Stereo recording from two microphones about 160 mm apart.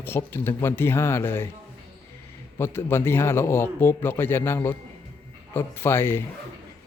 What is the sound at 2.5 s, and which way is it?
Speech, 15° left (ahead or behind).